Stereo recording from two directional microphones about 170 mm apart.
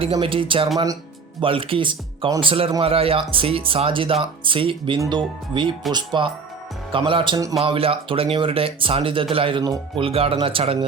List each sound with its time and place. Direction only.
0.0 s speech: 30° right (ahead or behind)